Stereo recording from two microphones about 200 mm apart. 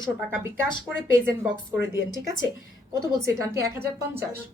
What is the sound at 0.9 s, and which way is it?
Speech, 65° left (ahead or behind).